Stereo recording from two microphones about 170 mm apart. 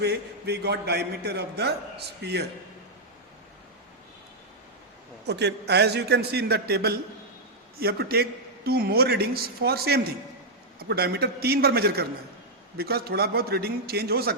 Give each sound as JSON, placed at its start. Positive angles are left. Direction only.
{"t": 0.0, "sound": "a man's voice", "side_deg": -75}
{"t": 5.2, "sound": "a man's voice", "side_deg": -80}